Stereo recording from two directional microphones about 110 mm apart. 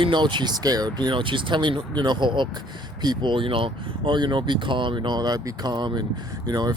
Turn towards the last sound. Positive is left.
turn(degrees=-40)  # may be behind; listen again after turning